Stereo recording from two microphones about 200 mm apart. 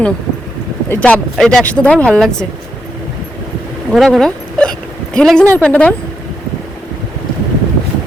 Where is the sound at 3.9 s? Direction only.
Centre (ahead or behind).